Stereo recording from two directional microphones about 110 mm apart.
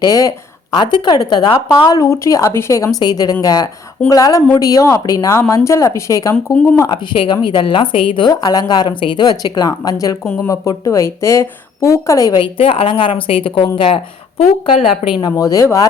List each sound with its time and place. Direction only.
0.0 s a woman's voice: 30° left (ahead or behind)
6.3 s speech: 15° left (ahead or behind)
6.7 s a woman's voice: 40° left (ahead or behind)
8.3 s a woman's voice: 35° left (ahead or behind)
12.4 s a woman's voice: 55° left (ahead or behind)
15.1 s a woman's voice: 35° left (ahead or behind)